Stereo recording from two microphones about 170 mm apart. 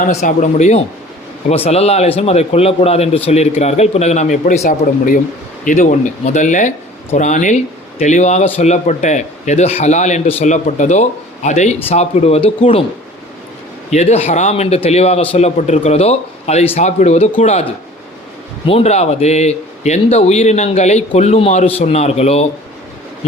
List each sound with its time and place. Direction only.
0.0 s a man's voice: 45° left (ahead or behind)
13.9 s speech: 40° left (ahead or behind)
18.7 s speech: 40° left (ahead or behind)